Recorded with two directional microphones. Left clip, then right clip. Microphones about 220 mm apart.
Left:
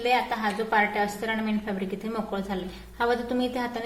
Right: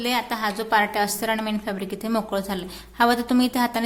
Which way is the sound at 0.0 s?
55° right (ahead or behind).